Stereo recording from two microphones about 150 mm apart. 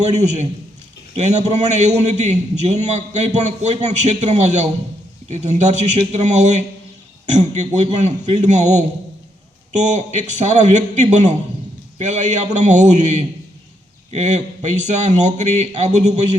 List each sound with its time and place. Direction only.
0.0 s a man's voice: 50° right (ahead or behind)